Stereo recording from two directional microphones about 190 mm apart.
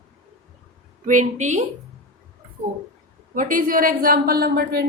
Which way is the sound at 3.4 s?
45° right (ahead or behind).